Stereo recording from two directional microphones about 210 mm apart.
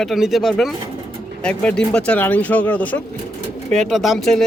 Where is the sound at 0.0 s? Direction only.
Centre (ahead or behind).